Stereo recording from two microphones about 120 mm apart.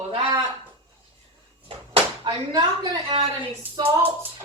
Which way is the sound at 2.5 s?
35° right (ahead or behind).